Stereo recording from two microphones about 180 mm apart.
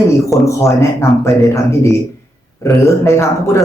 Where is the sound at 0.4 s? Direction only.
15° left (ahead or behind).